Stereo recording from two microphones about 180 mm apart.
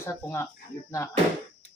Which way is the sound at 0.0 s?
15° left (ahead or behind).